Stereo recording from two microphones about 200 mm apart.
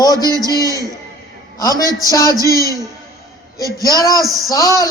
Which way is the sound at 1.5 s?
15° left (ahead or behind).